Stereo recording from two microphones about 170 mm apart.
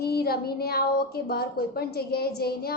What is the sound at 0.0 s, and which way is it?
A woman's voice, 65° left (ahead or behind).